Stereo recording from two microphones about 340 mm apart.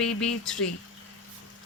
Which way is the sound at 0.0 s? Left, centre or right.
Centre.